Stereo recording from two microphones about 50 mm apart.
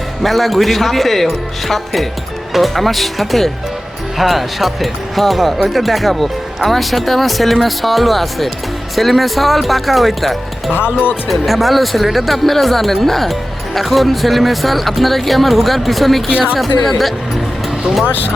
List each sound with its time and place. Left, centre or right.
0.2 s speech: centre
10.8 s speech: centre
11.3 s speech: centre